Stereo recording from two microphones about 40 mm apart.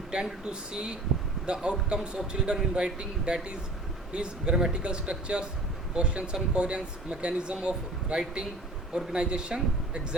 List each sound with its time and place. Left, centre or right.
0.1 s speech: centre
1.5 s speech: right